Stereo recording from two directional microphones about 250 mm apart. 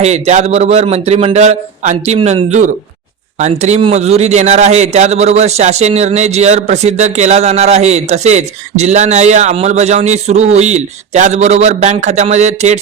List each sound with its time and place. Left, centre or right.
0.0 s a man's voice: right